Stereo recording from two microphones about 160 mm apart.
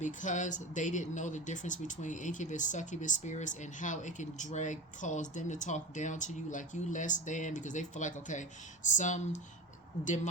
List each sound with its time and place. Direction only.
0.0 s speech: 50° left (ahead or behind)